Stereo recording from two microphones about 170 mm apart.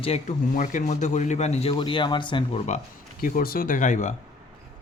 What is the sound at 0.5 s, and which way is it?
Speech, 50° left (ahead or behind).